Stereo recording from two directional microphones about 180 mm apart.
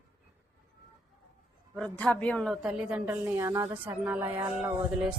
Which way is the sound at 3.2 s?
15° right (ahead or behind).